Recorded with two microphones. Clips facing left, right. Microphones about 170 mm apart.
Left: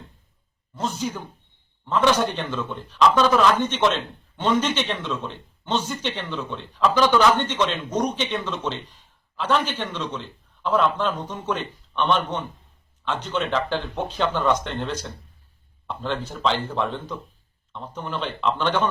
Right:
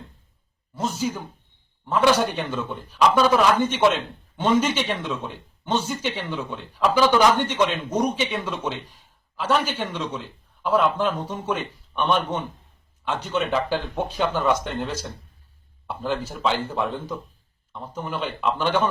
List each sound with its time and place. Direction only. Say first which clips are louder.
0.8 s a man's voice: right 1 dB; 5° right (ahead or behind)